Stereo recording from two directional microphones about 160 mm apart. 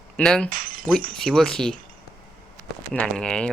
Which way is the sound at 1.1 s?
5° left (ahead or behind).